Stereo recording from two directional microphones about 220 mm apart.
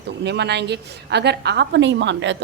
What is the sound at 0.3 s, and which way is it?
Speech, 50° right (ahead or behind).